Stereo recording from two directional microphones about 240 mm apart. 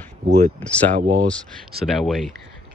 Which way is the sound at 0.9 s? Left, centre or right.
Right.